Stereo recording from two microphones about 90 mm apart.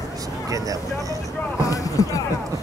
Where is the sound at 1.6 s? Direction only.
40° left (ahead or behind).